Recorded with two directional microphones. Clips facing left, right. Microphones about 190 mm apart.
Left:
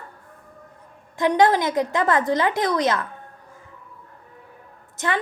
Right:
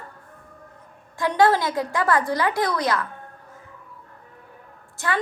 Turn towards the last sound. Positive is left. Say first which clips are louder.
# left 1 dB
turn(degrees=20)  # may be behind; listen again after turning